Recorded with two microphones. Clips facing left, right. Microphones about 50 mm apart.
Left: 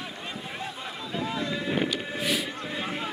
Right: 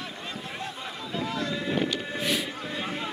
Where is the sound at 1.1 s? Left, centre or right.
Centre.